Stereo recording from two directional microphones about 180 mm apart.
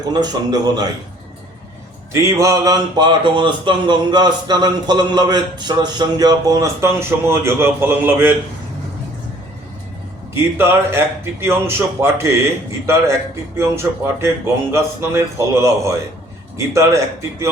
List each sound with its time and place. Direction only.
0.1 s speech: 20° right (ahead or behind)
2.1 s speech: 15° right (ahead or behind)
10.3 s speech: 15° right (ahead or behind)